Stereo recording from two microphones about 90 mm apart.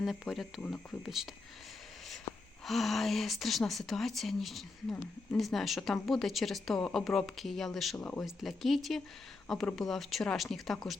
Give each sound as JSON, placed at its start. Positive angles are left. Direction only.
{"t": 0.0, "sound": "speech", "side_deg": 0}
{"t": 2.6, "sound": "speech", "side_deg": 0}
{"t": 7.9, "sound": "speech", "side_deg": 15}
{"t": 8.2, "sound": "speech", "side_deg": 0}